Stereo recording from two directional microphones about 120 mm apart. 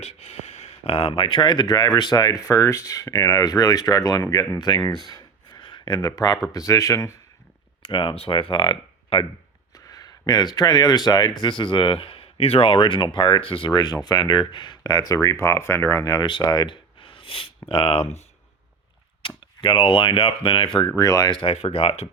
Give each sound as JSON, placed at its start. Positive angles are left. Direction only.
{"t": 0.0, "sound": "speech", "side_deg": 60}
{"t": 5.0, "sound": "a sound", "side_deg": 40}
{"t": 6.5, "sound": "speech", "side_deg": 30}
{"t": 7.8, "sound": "speech", "side_deg": 45}
{"t": 9.7, "sound": "speech", "side_deg": 30}
{"t": 19.6, "sound": "speech", "side_deg": 45}
{"t": 20.9, "sound": "speech", "side_deg": 30}
{"t": 21.5, "sound": "speech", "side_deg": 55}